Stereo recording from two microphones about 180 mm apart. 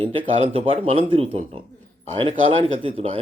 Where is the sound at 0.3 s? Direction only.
30° right (ahead or behind).